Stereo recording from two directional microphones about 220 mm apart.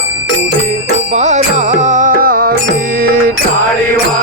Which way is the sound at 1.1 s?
30° right (ahead or behind).